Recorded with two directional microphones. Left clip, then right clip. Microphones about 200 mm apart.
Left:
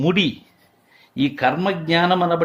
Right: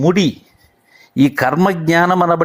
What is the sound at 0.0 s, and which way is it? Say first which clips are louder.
Speech: right 5 dB; 25° right (ahead or behind).